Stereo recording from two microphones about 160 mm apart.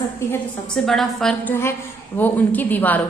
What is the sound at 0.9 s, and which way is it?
A woman's voice, centre (ahead or behind).